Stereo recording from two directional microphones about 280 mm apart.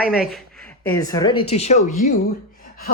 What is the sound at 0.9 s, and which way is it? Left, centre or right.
A woman's voice, centre.